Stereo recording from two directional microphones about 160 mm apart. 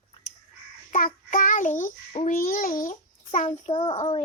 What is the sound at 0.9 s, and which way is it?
A child's voice, 55° left (ahead or behind).